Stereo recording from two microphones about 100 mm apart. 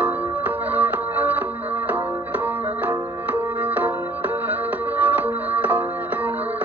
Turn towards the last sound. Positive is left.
turn(degrees=-15)  # may be behind; listen again after turning